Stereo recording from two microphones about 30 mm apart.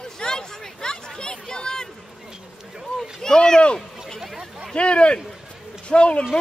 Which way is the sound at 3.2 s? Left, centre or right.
Left.